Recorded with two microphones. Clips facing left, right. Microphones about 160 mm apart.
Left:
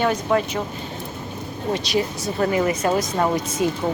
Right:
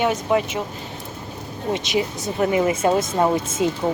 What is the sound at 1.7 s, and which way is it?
Speech, 20° right (ahead or behind).